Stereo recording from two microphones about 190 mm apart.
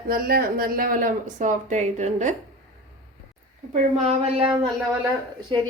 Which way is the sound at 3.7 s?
35° right (ahead or behind).